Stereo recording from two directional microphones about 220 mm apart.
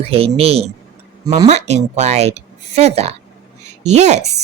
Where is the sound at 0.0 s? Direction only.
25° right (ahead or behind).